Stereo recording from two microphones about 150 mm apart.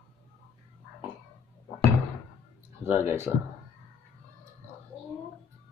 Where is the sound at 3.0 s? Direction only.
15° right (ahead or behind).